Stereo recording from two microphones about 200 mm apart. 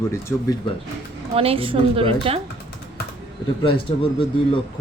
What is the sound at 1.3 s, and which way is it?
A woman's voice, 30° right (ahead or behind).